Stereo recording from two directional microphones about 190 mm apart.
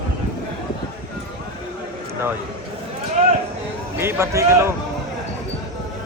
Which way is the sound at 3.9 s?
15° right (ahead or behind).